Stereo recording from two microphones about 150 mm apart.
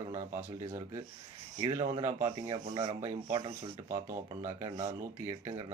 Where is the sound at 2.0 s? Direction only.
25° right (ahead or behind).